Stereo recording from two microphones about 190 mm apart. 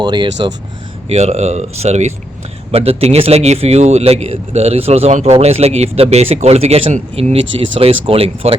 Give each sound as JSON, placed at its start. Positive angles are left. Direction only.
{"t": 0.0, "sound": "speech", "side_deg": -25}
{"t": 1.0, "sound": "speech", "side_deg": -35}